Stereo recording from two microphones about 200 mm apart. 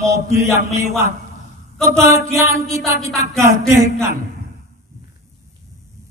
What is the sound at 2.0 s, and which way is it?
Speech, 15° right (ahead or behind).